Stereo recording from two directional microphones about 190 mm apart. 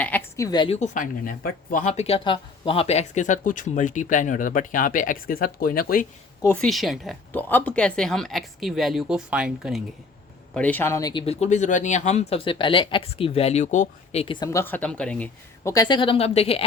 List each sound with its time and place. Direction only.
0.0 s a woman's voice: 10° left (ahead or behind)
0.8 s speech: 45° left (ahead or behind)
6.4 s speech: 5° left (ahead or behind)
10.5 s speech: 5° left (ahead or behind)
15.6 s speech: 20° left (ahead or behind)